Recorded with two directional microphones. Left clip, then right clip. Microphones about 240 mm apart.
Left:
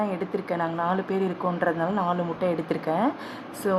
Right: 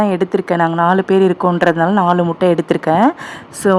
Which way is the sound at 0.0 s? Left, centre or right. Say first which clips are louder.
Right 13 dB; right.